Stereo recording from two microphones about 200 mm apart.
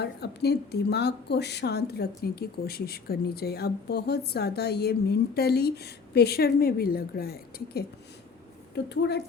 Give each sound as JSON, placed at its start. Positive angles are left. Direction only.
{"t": 0.0, "sound": "a woman's voice", "side_deg": 55}